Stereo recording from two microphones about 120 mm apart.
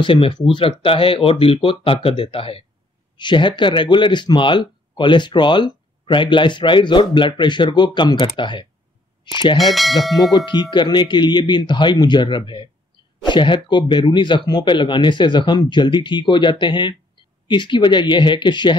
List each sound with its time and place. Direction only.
0.0 s speech: 45° left (ahead or behind)
9.6 s speech: centre (ahead or behind)
10.3 s speech: 40° left (ahead or behind)